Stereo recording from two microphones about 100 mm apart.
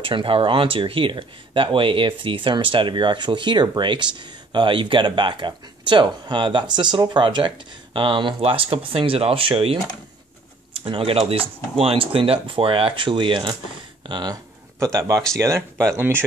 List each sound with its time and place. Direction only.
0.0 s speech: 60° right (ahead or behind)
8.4 s speech: 65° right (ahead or behind); by 16.3 s 25° right (ahead or behind)